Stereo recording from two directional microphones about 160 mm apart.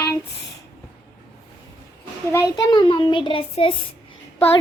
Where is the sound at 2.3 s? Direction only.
20° left (ahead or behind).